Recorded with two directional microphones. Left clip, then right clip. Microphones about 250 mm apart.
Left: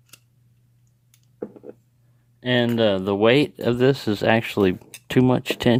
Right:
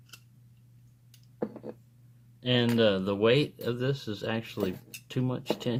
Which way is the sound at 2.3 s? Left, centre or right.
Left.